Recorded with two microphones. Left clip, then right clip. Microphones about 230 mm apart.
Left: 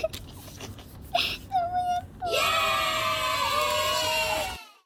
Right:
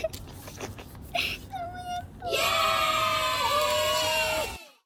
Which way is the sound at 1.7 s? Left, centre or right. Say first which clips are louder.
Left 8 dB; centre.